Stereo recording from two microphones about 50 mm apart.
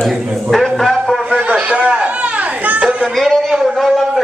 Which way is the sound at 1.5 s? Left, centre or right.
Right.